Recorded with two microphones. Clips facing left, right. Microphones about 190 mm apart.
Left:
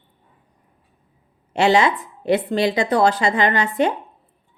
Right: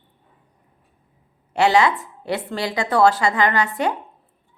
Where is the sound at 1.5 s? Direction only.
20° left (ahead or behind).